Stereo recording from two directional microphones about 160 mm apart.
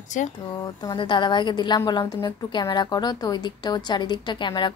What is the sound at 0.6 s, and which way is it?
A woman's voice, 25° left (ahead or behind).